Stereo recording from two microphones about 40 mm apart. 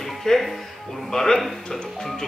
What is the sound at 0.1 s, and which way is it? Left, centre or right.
Speech, centre.